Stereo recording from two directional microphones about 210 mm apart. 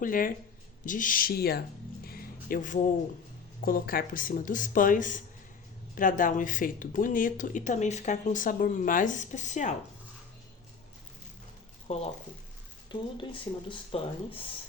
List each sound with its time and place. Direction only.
0.0 s speech: 40° left (ahead or behind)
2.0 s a sound: 45° left (ahead or behind)
3.6 s speech: 45° left (ahead or behind)
11.9 s speech: 30° left (ahead or behind)
13.7 s speech: 25° left (ahead or behind)